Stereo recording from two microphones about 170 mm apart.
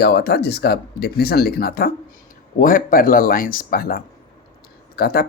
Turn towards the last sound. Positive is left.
turn(degrees=65)  # may be behind; listen again after turning